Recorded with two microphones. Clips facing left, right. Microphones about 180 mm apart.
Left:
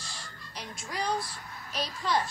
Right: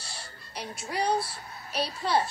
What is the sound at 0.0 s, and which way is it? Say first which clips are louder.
Music: right 1 dB; 30° right (ahead or behind).